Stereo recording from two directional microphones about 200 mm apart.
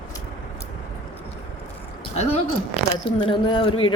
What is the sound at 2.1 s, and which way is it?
Speech, 35° left (ahead or behind).